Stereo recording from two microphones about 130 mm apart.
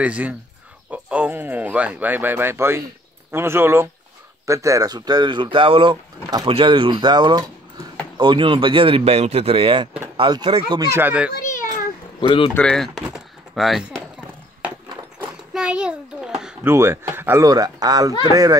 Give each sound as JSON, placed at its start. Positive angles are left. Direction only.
{"t": 0.0, "sound": "speech", "side_deg": -10}
{"t": 10.9, "sound": "speech", "side_deg": -15}
{"t": 12.2, "sound": "speech", "side_deg": 40}
{"t": 12.5, "sound": "speech", "side_deg": 5}
{"t": 15.1, "sound": "a sound", "side_deg": -5}
{"t": 16.6, "sound": "speech", "side_deg": -20}